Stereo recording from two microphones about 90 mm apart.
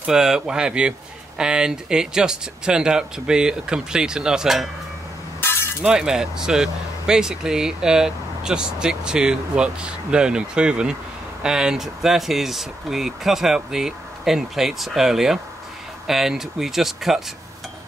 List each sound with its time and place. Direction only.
0.0 s speech: 5° right (ahead or behind)
5.4 s a sound: 25° left (ahead or behind)
5.8 s speech: 5° right (ahead or behind)